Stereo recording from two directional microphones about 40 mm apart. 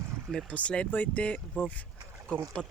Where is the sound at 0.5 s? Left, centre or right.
Left.